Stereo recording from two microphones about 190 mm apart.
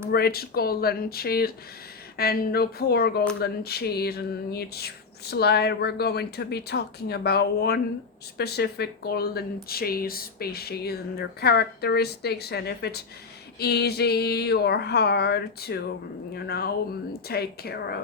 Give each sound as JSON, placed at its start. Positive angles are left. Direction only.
{"t": 0.1, "sound": "speech", "side_deg": 55}